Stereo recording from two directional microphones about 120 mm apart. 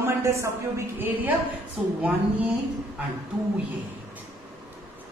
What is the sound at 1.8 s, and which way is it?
Speech, 5° right (ahead or behind).